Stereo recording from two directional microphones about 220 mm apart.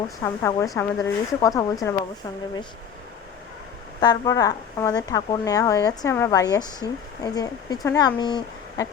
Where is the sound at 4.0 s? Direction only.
15° left (ahead or behind).